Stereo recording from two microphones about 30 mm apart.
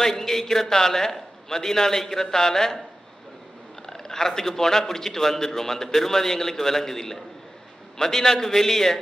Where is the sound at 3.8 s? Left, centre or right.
Centre.